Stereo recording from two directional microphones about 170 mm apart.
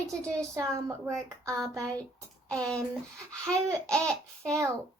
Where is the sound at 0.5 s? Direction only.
15° right (ahead or behind).